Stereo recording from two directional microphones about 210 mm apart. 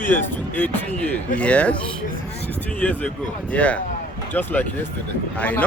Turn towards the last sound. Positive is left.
turn(degrees=5)  # may be behind; listen again after turning